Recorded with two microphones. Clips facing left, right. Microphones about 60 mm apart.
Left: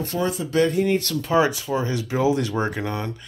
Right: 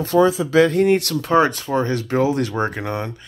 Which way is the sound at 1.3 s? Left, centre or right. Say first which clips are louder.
Right 3 dB; right.